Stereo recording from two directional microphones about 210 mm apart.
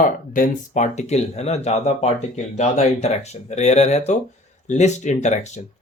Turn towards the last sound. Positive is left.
turn(degrees=35)  # may be behind; listen again after turning